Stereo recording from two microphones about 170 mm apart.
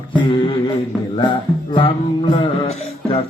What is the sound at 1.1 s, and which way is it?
Music, 30° left (ahead or behind).